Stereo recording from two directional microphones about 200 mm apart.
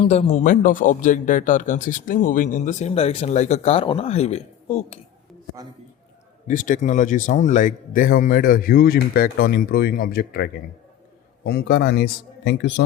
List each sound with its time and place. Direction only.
0.0 s speech: 30° left (ahead or behind)
6.5 s a man's voice: 40° left (ahead or behind); by 12.8 s 65° left (ahead or behind)